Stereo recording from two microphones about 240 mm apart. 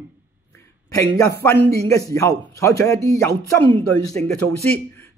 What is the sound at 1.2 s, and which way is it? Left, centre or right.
A man's voice, centre.